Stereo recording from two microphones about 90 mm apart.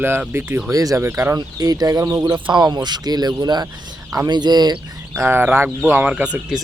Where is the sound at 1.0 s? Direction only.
25° right (ahead or behind).